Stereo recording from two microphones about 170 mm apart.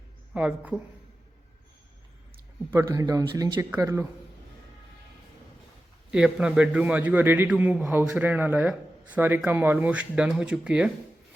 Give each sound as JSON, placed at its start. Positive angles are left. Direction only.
{"t": 0.3, "sound": "a man's voice", "side_deg": -10}
{"t": 2.6, "sound": "a man's voice", "side_deg": -20}
{"t": 6.1, "sound": "a man's voice", "side_deg": -5}